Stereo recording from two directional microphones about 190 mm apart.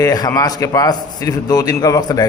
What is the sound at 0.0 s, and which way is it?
A man's voice, 20° left (ahead or behind).